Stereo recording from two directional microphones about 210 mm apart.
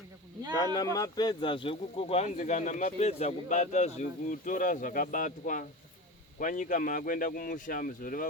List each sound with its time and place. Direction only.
0.5 s speech: 15° left (ahead or behind); by 8.3 s 40° left (ahead or behind)